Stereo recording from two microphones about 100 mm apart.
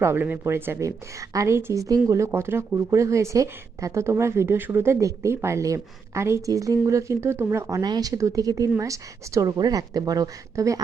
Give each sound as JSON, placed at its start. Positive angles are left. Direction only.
{"t": 0.0, "sound": "a woman's voice", "side_deg": -20}
{"t": 7.8, "sound": "speech", "side_deg": -40}